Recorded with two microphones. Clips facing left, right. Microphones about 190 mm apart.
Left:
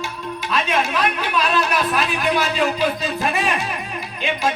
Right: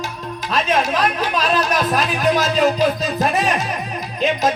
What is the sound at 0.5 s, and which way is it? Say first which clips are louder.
Music: right 3 dB; 40° right (ahead or behind).